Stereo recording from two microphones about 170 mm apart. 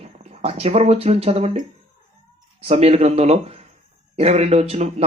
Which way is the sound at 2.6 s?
40° right (ahead or behind).